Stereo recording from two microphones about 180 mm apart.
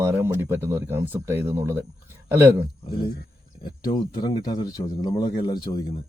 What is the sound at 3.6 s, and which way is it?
Speech, 25° left (ahead or behind).